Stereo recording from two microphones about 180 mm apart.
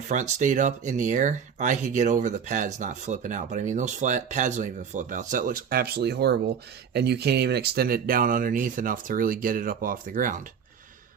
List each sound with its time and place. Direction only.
0.1 s speech: 40° right (ahead or behind)